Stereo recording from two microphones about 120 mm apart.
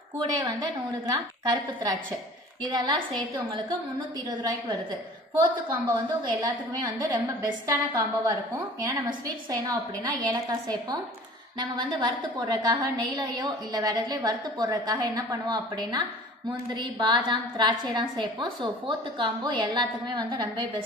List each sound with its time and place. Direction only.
0.3 s a woman's voice: 35° right (ahead or behind)
4.3 s a woman's voice: 35° right (ahead or behind)
11.6 s a woman's voice: 40° right (ahead or behind)